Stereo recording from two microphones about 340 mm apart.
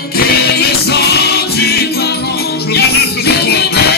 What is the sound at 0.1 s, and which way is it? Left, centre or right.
Music, left.